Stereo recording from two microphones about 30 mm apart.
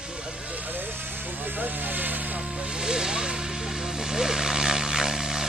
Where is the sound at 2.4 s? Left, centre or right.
Right.